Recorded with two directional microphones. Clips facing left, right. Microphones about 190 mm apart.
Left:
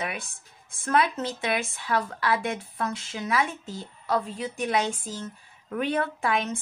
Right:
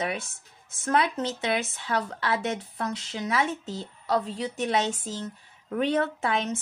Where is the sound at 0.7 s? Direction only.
20° right (ahead or behind).